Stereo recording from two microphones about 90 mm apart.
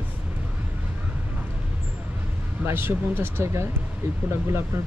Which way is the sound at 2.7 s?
25° right (ahead or behind).